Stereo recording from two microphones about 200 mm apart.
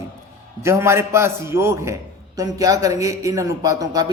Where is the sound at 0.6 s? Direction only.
10° right (ahead or behind).